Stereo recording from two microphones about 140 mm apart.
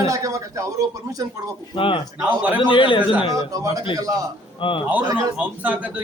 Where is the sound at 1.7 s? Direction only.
40° left (ahead or behind).